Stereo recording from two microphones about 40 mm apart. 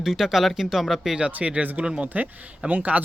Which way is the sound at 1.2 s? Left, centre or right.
Right.